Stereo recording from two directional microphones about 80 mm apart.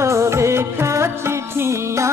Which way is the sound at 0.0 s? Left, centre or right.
Right.